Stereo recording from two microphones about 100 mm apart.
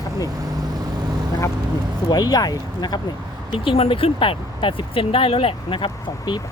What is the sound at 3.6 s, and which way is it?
Speech, 70° left (ahead or behind).